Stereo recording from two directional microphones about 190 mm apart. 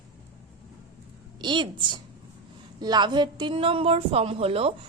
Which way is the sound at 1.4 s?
25° right (ahead or behind).